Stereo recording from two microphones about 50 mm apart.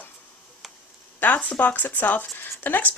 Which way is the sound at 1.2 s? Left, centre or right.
Left.